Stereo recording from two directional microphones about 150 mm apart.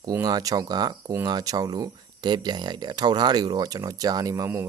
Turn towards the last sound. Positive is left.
turn(degrees=-20)  # may be behind; listen again after turning